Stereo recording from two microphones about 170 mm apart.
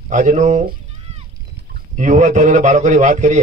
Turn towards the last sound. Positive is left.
turn(degrees=-45)  # may be behind; listen again after turning